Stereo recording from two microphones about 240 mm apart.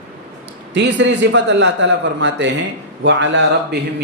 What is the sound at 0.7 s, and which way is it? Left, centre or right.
A man's voice, right.